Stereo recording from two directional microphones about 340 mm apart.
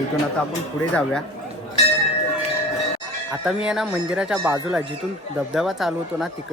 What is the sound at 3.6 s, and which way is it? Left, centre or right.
A man's voice, centre.